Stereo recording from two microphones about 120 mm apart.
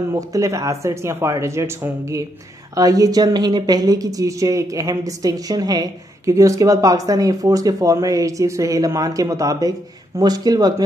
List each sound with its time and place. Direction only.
0.1 s speech: 30° right (ahead or behind)